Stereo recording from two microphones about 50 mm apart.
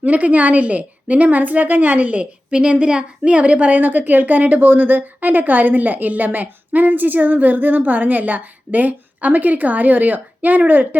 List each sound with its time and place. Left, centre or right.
0.0 s a woman's voice: right
2.5 s a woman's voice: centre; by 10.6 s right